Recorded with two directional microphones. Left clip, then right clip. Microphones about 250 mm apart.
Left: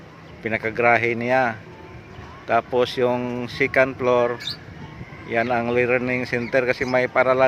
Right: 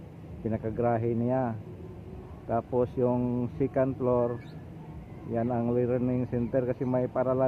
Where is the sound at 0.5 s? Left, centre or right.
Centre.